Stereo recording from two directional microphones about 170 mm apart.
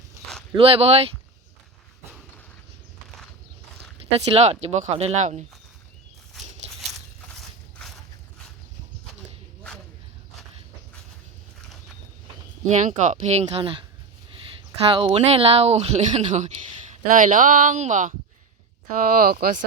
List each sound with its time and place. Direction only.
0.5 s speech: 35° right (ahead or behind)
4.0 s speech: 40° right (ahead or behind)
12.6 s speech: 45° right (ahead or behind)
17.1 s speech: 50° right (ahead or behind)
19.0 s speech: 55° right (ahead or behind)